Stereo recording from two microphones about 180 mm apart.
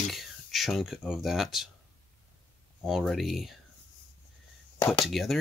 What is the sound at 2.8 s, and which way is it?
Speech, centre (ahead or behind).